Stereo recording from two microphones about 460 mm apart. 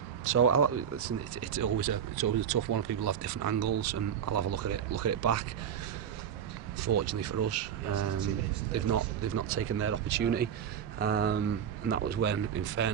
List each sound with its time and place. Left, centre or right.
0.3 s speech: right
6.8 s speech: right
7.9 s speech: right